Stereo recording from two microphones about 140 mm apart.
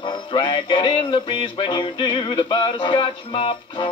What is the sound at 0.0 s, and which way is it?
Music, 35° left (ahead or behind).